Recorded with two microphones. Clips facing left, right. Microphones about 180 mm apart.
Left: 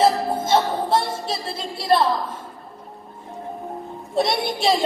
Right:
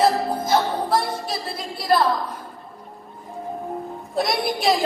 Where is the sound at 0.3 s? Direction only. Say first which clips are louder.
Left 1 dB; 25° left (ahead or behind).